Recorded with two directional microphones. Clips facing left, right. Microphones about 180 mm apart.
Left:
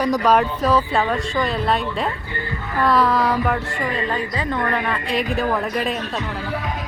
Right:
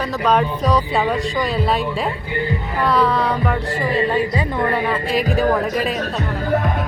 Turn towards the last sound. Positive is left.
turn(degrees=-50)  # may be behind; listen again after turning